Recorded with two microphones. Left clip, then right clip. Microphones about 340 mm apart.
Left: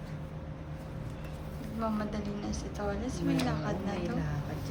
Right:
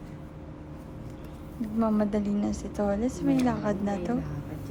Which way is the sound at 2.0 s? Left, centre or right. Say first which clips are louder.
Right 8 dB; centre.